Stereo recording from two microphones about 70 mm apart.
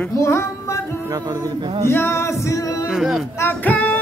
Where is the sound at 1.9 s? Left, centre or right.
Left.